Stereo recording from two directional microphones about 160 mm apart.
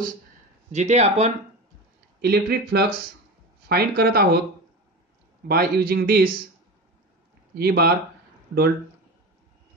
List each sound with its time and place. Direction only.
0.7 s speech: 45° right (ahead or behind)
2.2 s speech: 80° right
5.5 s speech: 70° right (ahead or behind)
7.5 s speech: 75° right (ahead or behind)